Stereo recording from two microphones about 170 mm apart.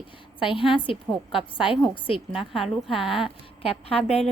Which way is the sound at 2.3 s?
Centre (ahead or behind).